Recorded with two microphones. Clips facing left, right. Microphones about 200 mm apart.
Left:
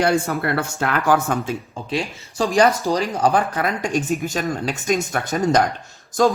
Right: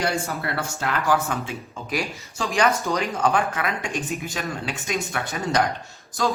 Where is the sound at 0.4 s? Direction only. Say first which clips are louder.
Left 5 dB; 55° left (ahead or behind).